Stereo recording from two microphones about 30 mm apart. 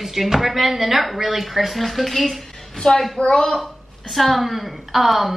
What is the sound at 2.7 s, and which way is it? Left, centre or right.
Speech, left.